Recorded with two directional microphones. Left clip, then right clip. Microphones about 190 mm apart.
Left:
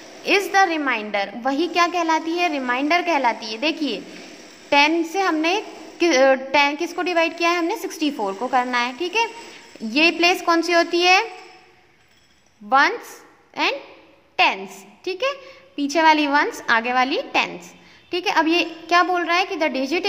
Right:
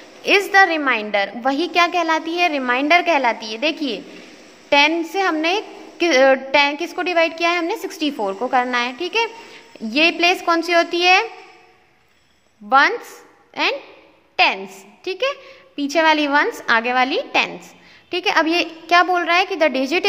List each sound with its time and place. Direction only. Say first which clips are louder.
0.2 s a woman's voice: right 4 dB; 15° right (ahead or behind)
12.6 s a woman's voice: right 2 dB; 10° right (ahead or behind)